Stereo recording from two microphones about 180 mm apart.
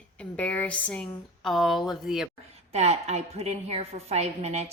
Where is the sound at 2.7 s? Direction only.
35° right (ahead or behind).